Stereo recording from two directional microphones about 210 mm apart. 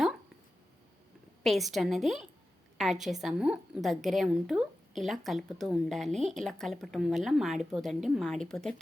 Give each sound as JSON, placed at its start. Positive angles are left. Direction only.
{"t": 1.5, "sound": "a woman's voice", "side_deg": 0}